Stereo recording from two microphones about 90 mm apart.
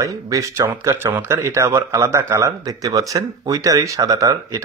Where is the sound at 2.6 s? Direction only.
40° right (ahead or behind).